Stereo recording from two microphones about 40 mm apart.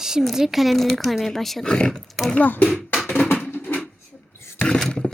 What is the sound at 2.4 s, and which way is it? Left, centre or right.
Speech, left.